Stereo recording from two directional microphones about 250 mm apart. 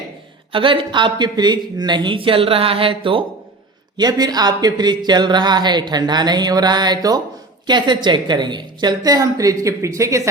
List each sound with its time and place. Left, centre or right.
0.5 s speech: centre